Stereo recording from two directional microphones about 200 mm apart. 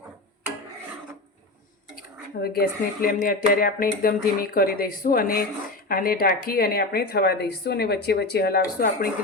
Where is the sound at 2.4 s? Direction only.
50° left (ahead or behind).